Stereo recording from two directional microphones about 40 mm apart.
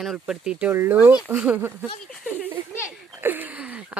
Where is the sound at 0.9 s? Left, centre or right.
Right.